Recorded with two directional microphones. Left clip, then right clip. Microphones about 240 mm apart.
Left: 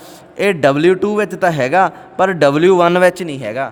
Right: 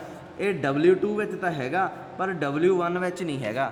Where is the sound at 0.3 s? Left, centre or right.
Left.